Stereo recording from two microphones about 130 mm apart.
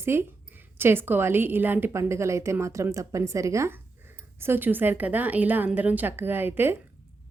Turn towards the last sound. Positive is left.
turn(degrees=-15)  # may be behind; listen again after turning